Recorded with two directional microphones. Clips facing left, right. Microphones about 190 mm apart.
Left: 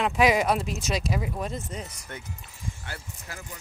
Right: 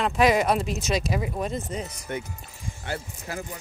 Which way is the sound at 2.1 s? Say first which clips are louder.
Right 11 dB; 15° right (ahead or behind).